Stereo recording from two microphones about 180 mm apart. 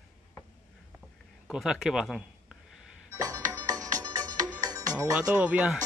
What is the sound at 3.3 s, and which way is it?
Music, 20° right (ahead or behind).